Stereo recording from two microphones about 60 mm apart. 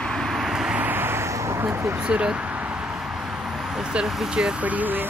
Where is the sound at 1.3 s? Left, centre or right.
Right.